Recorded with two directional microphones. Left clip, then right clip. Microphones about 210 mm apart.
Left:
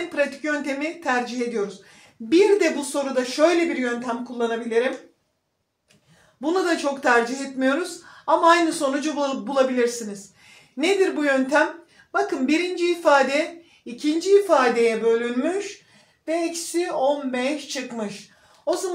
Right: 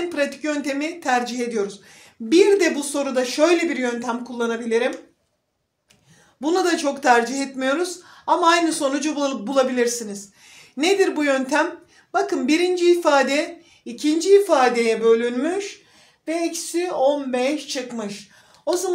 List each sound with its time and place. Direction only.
0.1 s speech: 45° right (ahead or behind)
6.4 s speech: 45° right (ahead or behind)
18.7 s speech: 45° right (ahead or behind)